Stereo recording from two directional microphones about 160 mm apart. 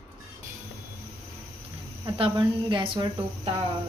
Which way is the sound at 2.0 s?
30° right (ahead or behind).